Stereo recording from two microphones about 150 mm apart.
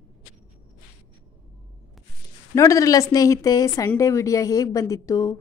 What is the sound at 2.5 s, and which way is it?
Speech, 20° left (ahead or behind).